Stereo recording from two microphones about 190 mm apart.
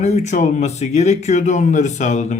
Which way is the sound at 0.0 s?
35° left (ahead or behind).